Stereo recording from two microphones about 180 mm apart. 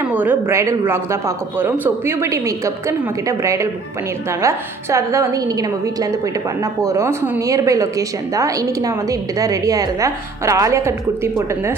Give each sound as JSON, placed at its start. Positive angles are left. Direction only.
{"t": 0.1, "sound": "a woman's voice", "side_deg": -10}
{"t": 6.8, "sound": "a woman's voice", "side_deg": -15}